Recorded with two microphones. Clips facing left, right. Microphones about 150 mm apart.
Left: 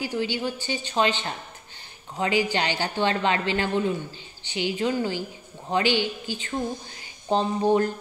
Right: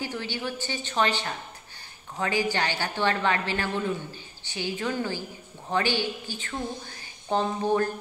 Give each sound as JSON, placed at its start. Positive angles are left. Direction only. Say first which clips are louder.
{"t": 0.0, "sound": "a woman's voice", "louder": "left 5 dB", "side_deg": 15}